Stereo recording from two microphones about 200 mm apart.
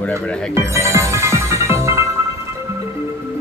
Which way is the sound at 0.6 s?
15° right (ahead or behind).